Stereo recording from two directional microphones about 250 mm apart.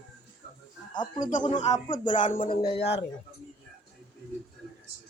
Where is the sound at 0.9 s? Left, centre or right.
Centre.